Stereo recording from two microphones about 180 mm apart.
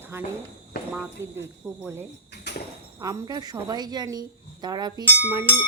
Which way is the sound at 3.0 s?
20° right (ahead or behind).